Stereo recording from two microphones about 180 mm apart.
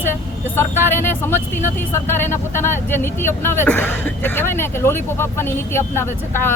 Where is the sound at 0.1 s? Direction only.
10° left (ahead or behind).